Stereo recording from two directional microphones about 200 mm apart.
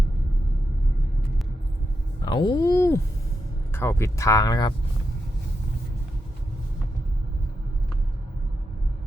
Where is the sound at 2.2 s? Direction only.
20° left (ahead or behind).